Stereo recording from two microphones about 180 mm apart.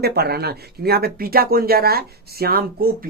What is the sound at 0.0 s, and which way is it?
Speech, 60° right (ahead or behind).